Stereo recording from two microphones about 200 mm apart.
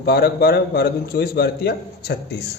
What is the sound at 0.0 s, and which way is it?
A man's voice, 50° left (ahead or behind).